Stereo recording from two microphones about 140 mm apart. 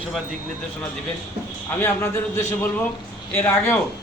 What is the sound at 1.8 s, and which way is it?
A man's voice, 15° left (ahead or behind).